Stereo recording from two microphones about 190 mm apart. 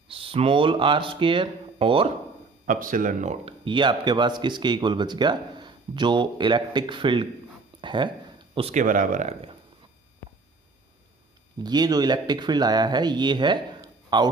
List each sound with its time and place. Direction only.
0.1 s speech: 30° right (ahead or behind)
2.6 s speech: 45° right (ahead or behind)
3.4 s speech: 25° right (ahead or behind)
8.8 s speech: 45° right (ahead or behind)
11.6 s speech: 20° right (ahead or behind)